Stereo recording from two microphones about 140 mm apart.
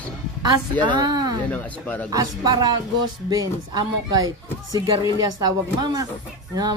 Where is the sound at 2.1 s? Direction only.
30° right (ahead or behind).